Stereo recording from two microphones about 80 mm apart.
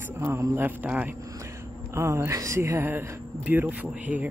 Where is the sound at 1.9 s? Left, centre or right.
Right; by 4.3 s centre.